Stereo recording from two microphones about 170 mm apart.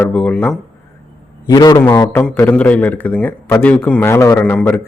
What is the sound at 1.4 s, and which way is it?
A man's voice, 20° left (ahead or behind).